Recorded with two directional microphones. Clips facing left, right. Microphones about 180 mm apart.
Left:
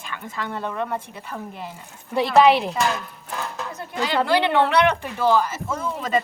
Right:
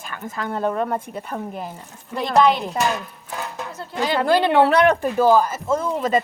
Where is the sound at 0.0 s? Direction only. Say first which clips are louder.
Right 2 dB; 40° right (ahead or behind).